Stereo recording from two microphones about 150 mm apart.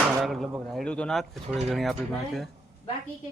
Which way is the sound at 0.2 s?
Centre (ahead or behind).